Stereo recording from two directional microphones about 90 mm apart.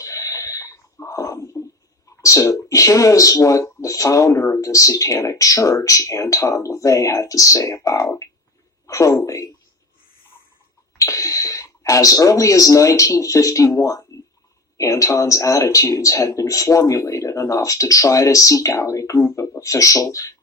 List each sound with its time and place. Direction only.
0.0 s a sound: 35° left (ahead or behind)
2.0 s speech: 35° left (ahead or behind)
10.9 s speech: 40° left (ahead or behind)